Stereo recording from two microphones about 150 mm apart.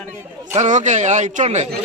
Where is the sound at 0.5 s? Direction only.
55° right (ahead or behind).